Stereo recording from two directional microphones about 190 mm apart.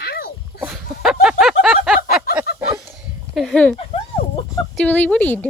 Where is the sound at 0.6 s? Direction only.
5° right (ahead or behind).